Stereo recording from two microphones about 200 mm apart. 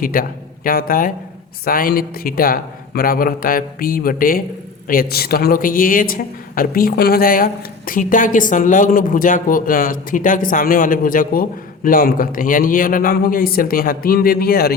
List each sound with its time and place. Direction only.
0.0 s a man's voice: 45° left (ahead or behind)